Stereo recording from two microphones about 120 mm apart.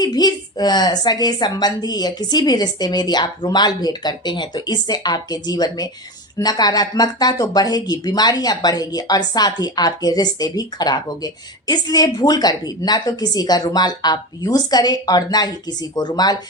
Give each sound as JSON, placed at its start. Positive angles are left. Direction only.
{"t": 0.0, "sound": "speech", "side_deg": 35}